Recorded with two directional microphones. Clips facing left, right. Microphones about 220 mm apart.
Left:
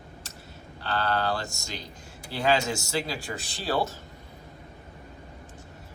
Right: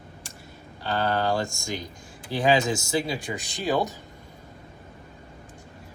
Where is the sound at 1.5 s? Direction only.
50° right (ahead or behind).